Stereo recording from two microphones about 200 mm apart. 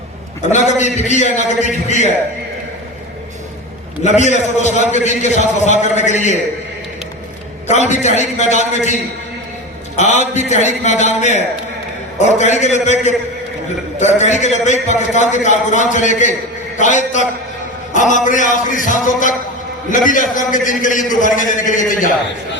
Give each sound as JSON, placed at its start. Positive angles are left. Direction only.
{"t": 0.5, "sound": "a man's voice", "side_deg": 35}
{"t": 4.0, "sound": "a man's voice", "side_deg": 35}
{"t": 7.7, "sound": "a man's voice", "side_deg": 35}